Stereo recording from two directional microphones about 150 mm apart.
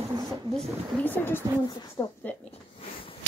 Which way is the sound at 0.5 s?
10° left (ahead or behind).